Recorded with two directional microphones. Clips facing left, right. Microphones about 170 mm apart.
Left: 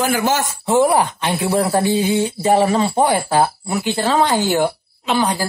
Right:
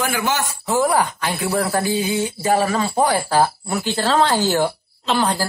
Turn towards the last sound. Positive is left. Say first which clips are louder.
# left 1 dB
turn(degrees=15)  # may be behind; listen again after turning